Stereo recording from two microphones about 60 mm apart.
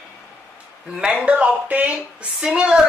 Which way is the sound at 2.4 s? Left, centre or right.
Centre.